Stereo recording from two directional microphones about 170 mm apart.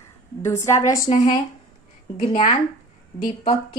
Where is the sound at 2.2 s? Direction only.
30° left (ahead or behind).